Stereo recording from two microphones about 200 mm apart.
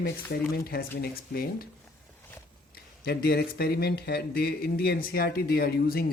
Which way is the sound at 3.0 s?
50° left (ahead or behind).